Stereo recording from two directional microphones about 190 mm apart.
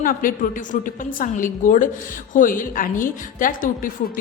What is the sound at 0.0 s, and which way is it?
A woman's voice, 45° left (ahead or behind).